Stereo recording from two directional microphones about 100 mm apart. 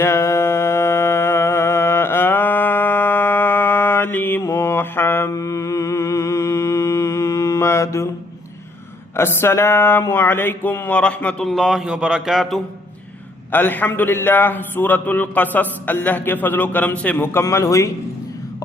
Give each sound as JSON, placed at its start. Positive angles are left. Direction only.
{"t": 0.0, "sound": "mantra", "side_deg": 25}
{"t": 9.1, "sound": "a sound", "side_deg": 25}
{"t": 13.5, "sound": "a man's voice", "side_deg": 20}